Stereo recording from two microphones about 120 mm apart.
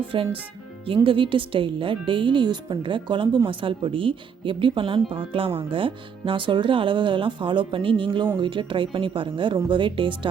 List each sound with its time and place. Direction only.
0.1 s a woman's voice: 45° right (ahead or behind)